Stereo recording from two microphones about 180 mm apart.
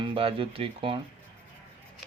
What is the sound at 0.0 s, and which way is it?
Speech, 30° right (ahead or behind).